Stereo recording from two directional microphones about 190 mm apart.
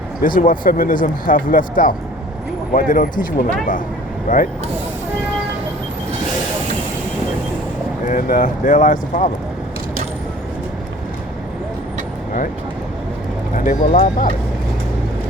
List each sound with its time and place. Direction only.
0.2 s speech: 45° left (ahead or behind)
8.0 s speech: 45° left (ahead or behind)
13.7 s speech: 50° left (ahead or behind)